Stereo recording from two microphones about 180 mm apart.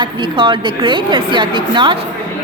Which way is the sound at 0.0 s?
30° right (ahead or behind).